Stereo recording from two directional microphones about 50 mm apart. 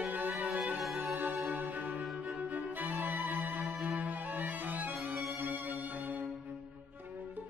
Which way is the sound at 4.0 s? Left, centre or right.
Right.